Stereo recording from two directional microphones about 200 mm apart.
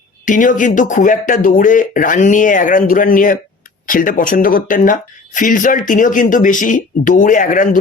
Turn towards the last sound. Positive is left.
turn(degrees=40)  # may be behind; listen again after turning